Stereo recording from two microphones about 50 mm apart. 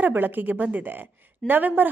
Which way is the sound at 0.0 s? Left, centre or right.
Right.